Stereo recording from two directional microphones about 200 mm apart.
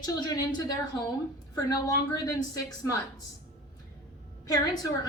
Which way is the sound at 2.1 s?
20° left (ahead or behind).